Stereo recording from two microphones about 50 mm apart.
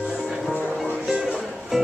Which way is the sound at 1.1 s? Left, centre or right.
Centre.